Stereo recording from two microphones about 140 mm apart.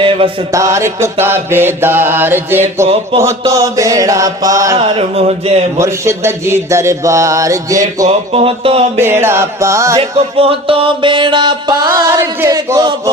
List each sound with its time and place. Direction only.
0.0 s mantra: 40° right (ahead or behind)
0.5 s music: 20° right (ahead or behind)
1.2 s mantra: 15° right (ahead or behind)
2.8 s a sound: 50° right (ahead or behind)
3.2 s music: 20° right (ahead or behind)
4.8 s a sound: 45° right (ahead or behind)
5.7 s music: 20° right (ahead or behind)
8.3 s a sound: 45° right (ahead or behind)
9.0 s music: 15° right (ahead or behind)
10.0 s music: 40° right (ahead or behind)